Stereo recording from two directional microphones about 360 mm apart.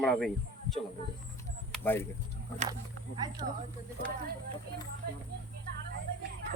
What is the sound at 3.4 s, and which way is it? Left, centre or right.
Speech, centre.